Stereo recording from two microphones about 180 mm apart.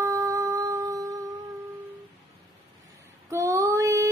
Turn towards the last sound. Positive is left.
turn(degrees=-15)  # may be behind; listen again after turning